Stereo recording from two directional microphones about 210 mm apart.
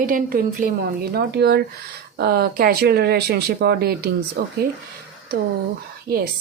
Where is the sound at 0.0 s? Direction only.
40° right (ahead or behind).